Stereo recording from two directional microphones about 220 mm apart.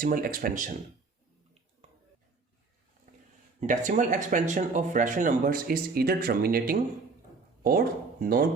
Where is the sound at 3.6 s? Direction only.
35° right (ahead or behind).